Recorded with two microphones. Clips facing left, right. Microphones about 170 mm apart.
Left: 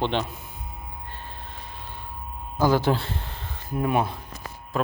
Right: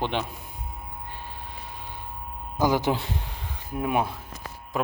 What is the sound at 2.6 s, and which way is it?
A man's voice, 15° right (ahead or behind).